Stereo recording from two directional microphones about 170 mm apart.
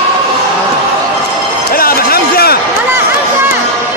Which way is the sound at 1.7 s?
60° left (ahead or behind).